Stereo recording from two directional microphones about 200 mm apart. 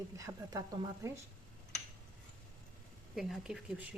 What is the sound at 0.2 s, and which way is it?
Speech, 15° right (ahead or behind).